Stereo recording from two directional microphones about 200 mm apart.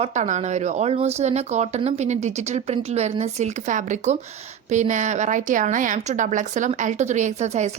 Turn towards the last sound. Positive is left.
turn(degrees=-35)  # may be behind; listen again after turning